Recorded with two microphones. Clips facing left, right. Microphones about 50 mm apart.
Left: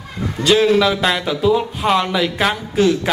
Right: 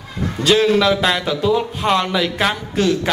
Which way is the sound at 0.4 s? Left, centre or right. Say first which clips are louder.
Left 1 dB; centre.